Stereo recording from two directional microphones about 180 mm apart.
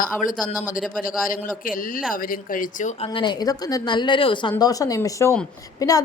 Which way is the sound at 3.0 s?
25° left (ahead or behind).